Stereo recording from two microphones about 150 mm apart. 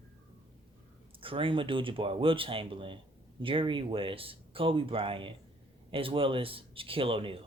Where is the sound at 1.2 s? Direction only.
35° right (ahead or behind).